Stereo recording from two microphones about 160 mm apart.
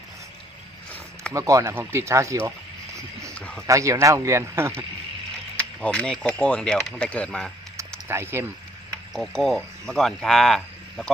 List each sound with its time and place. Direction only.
1.3 s speech: 20° right (ahead or behind)
3.3 s a sound: 10° left (ahead or behind)
3.7 s speech: 20° right (ahead or behind)
5.5 s speech: 5° left (ahead or behind)
8.0 s speech: 15° right (ahead or behind)
9.1 s speech: 5° left (ahead or behind)